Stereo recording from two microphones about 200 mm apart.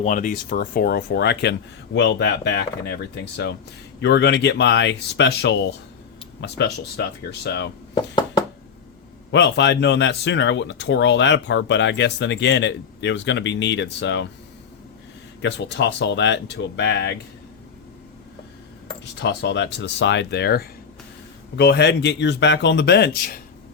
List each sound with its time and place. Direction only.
0.0 s speech: 40° left (ahead or behind); by 8.1 s 60° left (ahead or behind)
9.3 s speech: 60° left (ahead or behind)
15.4 s speech: 65° left (ahead or behind)
19.2 s speech: 60° left (ahead or behind)